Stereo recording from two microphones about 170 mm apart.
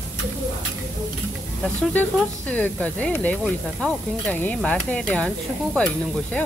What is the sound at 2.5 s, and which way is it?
Speech, 10° left (ahead or behind).